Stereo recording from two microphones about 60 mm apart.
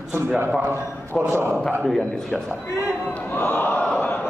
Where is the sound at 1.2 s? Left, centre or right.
Right.